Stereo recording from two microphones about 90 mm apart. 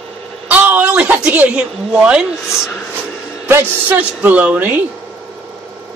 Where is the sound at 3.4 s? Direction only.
25° right (ahead or behind).